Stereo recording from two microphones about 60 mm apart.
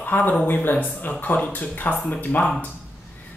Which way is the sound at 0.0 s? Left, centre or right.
Left.